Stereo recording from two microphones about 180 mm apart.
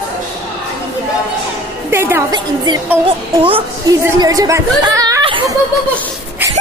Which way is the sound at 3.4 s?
30° right (ahead or behind).